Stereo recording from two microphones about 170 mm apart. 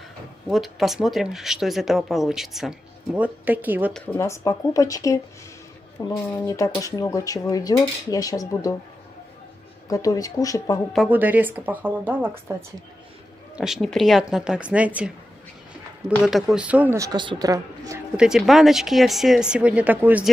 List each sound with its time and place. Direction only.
0.5 s speech: centre (ahead or behind)
3.9 s speech: 10° left (ahead or behind)
9.8 s speech: 20° left (ahead or behind)
11.1 s a woman's voice: 10° right (ahead or behind)
13.6 s speech: centre (ahead or behind)
16.3 s a woman's voice: centre (ahead or behind); by 18.0 s 20° right (ahead or behind)
18.1 s speech: 5° right (ahead or behind)